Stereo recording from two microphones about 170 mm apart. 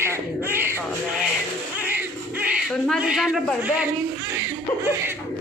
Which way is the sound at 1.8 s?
10° right (ahead or behind).